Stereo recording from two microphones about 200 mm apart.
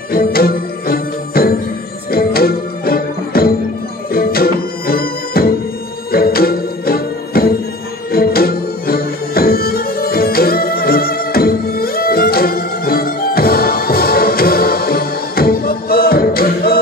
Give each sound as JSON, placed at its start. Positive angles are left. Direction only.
{"t": 0.1, "sound": "music", "side_deg": 50}